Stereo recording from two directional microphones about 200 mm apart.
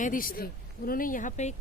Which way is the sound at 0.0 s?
45° left (ahead or behind).